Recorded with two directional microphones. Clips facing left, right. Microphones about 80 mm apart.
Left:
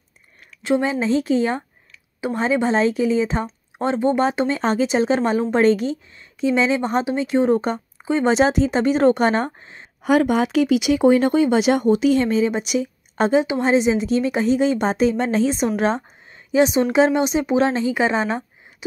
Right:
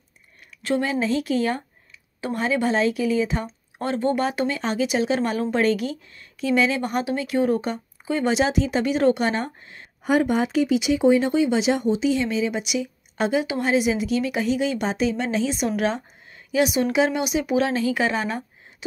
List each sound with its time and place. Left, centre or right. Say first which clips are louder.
0.6 s a woman's voice: left 3 dB; left
10.0 s a woman's voice: left 3 dB; left